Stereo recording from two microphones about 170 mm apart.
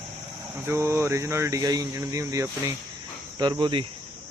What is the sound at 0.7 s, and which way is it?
Speech, 15° right (ahead or behind).